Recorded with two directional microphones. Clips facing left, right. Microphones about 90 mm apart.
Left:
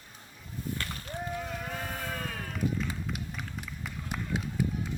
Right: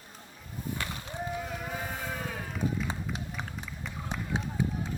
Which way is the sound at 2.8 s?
25° right (ahead or behind).